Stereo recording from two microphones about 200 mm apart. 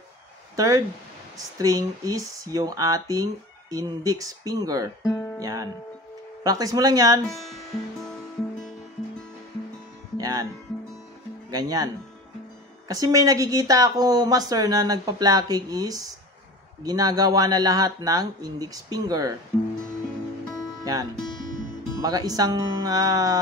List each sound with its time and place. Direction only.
0.6 s speech: 15° right (ahead or behind)
5.0 s speech: 15° left (ahead or behind)
5.4 s speech: 15° right (ahead or behind)
7.2 s speech: centre (ahead or behind)
10.1 s music: 20° right (ahead or behind)
11.5 s speech: 20° right (ahead or behind)
20.8 s speech: 20° right (ahead or behind)